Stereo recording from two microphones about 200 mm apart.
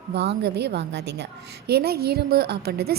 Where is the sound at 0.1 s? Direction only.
55° right (ahead or behind).